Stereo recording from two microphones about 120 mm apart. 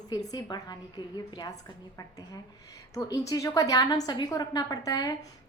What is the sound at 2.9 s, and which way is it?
A woman's voice, 30° left (ahead or behind).